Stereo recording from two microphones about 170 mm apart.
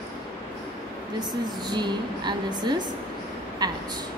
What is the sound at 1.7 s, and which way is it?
A woman's voice, 25° right (ahead or behind).